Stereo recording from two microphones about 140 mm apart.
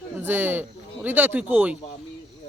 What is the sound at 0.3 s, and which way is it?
Speech, 15° right (ahead or behind).